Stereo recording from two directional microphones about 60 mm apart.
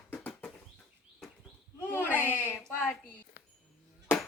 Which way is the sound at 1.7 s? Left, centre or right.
Left.